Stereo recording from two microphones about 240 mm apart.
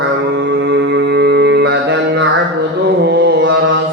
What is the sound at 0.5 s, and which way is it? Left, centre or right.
Music, right.